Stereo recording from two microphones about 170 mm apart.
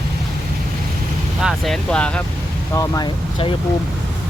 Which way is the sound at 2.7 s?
20° left (ahead or behind).